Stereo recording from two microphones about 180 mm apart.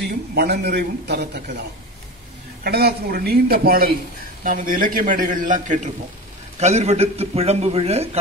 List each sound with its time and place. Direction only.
0.3 s a man's voice: 65° right (ahead or behind)
2.6 s a man's voice: 60° right (ahead or behind); by 8.2 s 35° right (ahead or behind)